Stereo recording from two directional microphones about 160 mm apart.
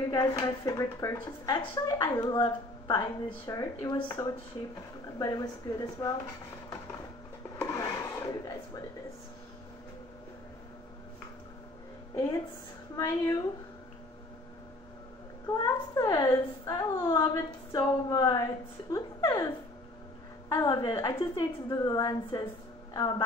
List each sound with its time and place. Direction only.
0.1 s a woman's voice: 25° left (ahead or behind)
7.6 s wood: 20° left (ahead or behind)
12.9 s a woman's voice: 20° left (ahead or behind)
15.4 s a woman's voice: 20° left (ahead or behind)